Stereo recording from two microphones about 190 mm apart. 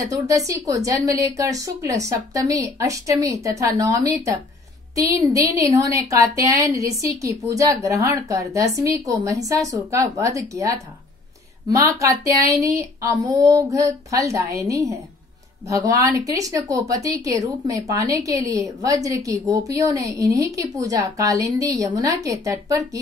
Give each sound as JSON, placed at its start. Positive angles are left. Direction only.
{"t": 0.0, "sound": "a woman's voice", "side_deg": -15}